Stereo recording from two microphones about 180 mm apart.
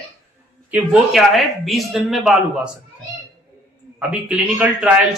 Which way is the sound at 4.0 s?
5° right (ahead or behind).